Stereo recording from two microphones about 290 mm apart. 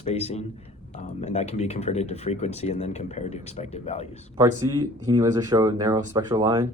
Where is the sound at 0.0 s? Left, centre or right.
Left.